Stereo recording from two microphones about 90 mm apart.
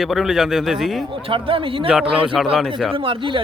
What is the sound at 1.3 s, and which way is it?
Speech, 80° right.